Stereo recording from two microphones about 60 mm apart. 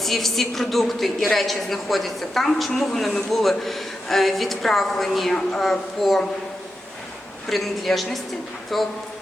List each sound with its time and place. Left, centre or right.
0.0 s a woman's voice: centre
7.5 s a woman's voice: centre